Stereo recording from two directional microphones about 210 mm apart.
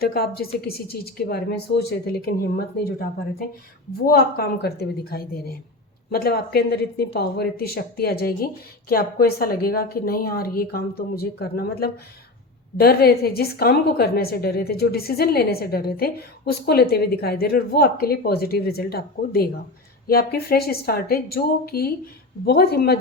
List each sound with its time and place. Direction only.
0.0 s a woman's voice: 45° left (ahead or behind)
4.0 s a woman's voice: 50° left (ahead or behind)